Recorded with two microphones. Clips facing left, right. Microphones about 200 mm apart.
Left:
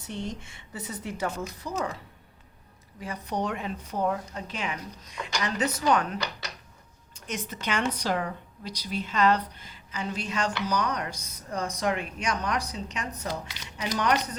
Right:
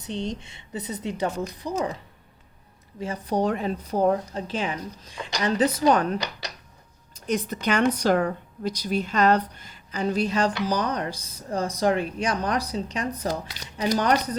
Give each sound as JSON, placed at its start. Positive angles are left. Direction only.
{"t": 0.0, "sound": "a woman's voice", "side_deg": -20}
{"t": 1.7, "sound": "a woman's voice", "side_deg": -25}
{"t": 3.0, "sound": "speech", "side_deg": -30}